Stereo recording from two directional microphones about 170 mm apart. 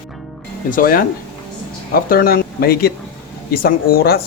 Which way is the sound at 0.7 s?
55° left (ahead or behind).